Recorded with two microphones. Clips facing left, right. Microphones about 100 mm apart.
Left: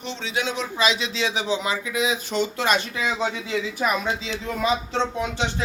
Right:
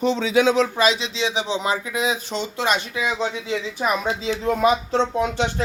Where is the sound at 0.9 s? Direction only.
25° right (ahead or behind).